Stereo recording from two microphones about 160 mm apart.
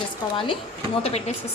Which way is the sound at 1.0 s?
40° left (ahead or behind).